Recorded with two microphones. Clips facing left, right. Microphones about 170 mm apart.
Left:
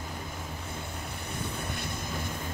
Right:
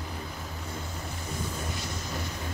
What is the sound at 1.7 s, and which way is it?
Vehicle, 55° left (ahead or behind).